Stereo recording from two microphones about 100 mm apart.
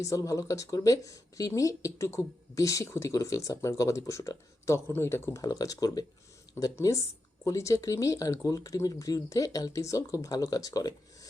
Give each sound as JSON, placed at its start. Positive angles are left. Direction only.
{"t": 0.0, "sound": "speech", "side_deg": 35}
{"t": 6.6, "sound": "speech", "side_deg": 30}